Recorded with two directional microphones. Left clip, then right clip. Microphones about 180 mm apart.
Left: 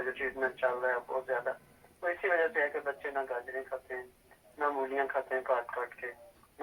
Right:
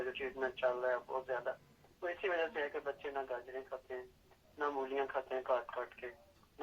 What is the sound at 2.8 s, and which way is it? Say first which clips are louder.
Speech: left 6 dB; 25° right (ahead or behind).